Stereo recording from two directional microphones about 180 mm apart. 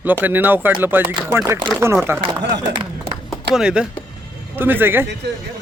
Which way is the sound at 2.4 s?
70° right (ahead or behind).